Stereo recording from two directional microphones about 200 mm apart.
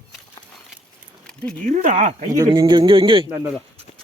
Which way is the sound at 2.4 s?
25° right (ahead or behind).